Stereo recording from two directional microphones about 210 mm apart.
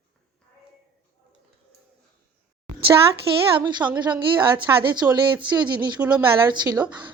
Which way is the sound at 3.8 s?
5° right (ahead or behind).